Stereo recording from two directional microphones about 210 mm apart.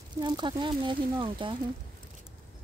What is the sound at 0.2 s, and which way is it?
Speech, 20° right (ahead or behind).